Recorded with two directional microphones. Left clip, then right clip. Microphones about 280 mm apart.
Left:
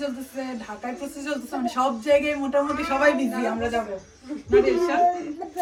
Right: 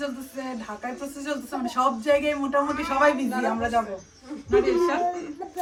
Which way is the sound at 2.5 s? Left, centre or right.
Centre.